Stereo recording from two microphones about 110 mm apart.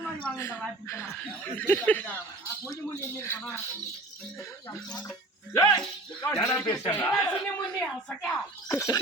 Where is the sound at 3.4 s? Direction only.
5° left (ahead or behind).